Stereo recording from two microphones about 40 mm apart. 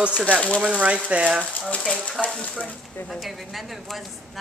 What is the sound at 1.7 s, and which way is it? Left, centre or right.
Speech, left.